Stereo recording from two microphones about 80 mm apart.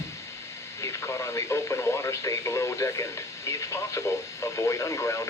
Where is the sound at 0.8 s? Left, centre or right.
Left.